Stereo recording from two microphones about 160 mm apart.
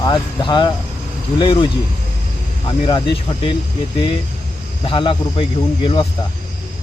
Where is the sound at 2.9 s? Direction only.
30° left (ahead or behind).